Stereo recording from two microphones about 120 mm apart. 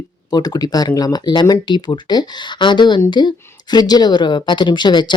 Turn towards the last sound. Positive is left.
turn(degrees=40)  # may be behind; listen again after turning